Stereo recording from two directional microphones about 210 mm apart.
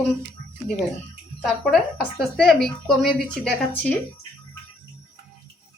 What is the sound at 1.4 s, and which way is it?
Speech, centre (ahead or behind).